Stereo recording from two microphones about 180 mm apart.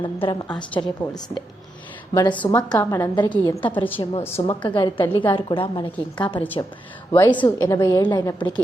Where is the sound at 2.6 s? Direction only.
20° left (ahead or behind).